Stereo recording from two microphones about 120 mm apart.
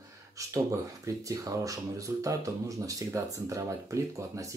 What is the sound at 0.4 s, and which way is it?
Speech, 25° right (ahead or behind).